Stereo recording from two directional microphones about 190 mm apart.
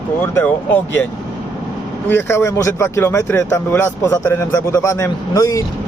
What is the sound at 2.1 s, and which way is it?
Speech, 15° left (ahead or behind).